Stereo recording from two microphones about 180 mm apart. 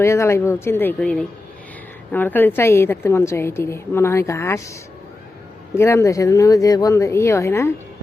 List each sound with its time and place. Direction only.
0.0 s a woman's voice: 15° left (ahead or behind)
5.7 s a woman's voice: 15° left (ahead or behind)